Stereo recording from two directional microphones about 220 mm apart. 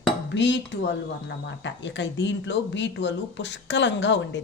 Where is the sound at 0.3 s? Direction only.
55° left (ahead or behind).